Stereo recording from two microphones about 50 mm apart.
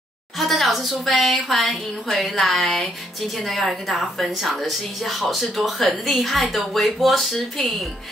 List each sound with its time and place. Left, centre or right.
0.4 s a woman's voice: centre